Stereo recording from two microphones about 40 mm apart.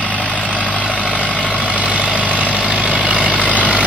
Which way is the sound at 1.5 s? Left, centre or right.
Right.